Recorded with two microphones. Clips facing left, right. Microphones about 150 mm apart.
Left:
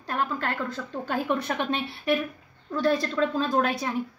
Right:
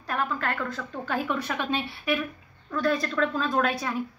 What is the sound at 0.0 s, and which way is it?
A woman's voice, 30° left (ahead or behind).